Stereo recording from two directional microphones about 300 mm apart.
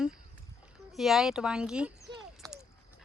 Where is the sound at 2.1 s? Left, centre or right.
Centre.